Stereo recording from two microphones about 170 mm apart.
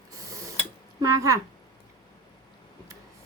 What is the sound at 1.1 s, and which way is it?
Speech, 20° right (ahead or behind).